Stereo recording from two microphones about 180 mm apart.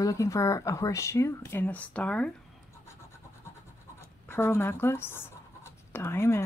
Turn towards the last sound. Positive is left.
turn(degrees=15)  # may be behind; listen again after turning